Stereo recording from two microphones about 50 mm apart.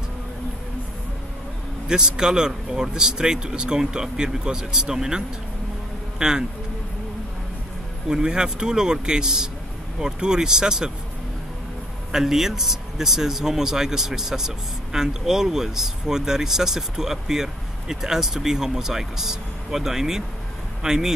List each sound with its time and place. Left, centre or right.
1.9 s speech: centre
8.1 s speech: centre
12.1 s speech: centre